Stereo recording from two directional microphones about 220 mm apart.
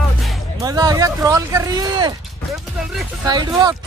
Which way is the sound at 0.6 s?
15° right (ahead or behind).